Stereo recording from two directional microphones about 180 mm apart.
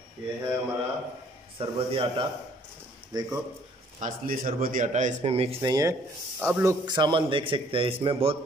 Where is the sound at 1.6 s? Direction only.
30° right (ahead or behind).